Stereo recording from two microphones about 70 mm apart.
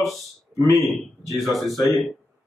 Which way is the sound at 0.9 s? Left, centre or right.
Centre.